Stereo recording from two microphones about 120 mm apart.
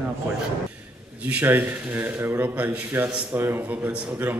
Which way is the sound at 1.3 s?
15° right (ahead or behind).